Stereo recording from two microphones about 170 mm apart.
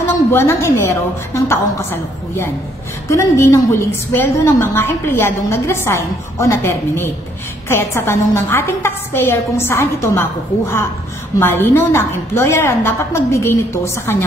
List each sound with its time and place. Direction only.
0.3 s a woman's voice: 15° left (ahead or behind)